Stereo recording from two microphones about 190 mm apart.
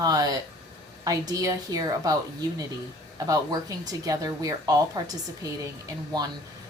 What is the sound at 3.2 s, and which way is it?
A woman's voice, 20° right (ahead or behind).